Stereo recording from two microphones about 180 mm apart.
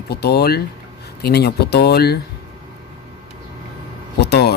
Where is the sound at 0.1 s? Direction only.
65° left (ahead or behind).